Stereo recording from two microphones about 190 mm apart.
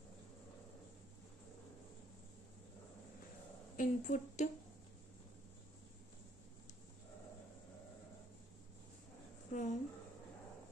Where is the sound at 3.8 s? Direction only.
40° left (ahead or behind).